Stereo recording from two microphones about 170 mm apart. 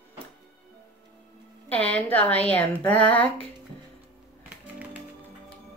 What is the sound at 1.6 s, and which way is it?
Speech, 10° left (ahead or behind).